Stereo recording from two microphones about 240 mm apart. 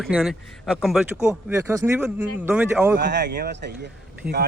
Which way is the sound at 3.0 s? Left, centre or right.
Right.